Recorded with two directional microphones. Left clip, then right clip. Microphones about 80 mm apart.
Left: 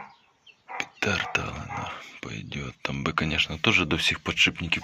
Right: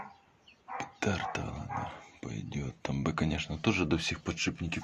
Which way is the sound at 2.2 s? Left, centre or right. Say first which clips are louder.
Left 4 dB; centre.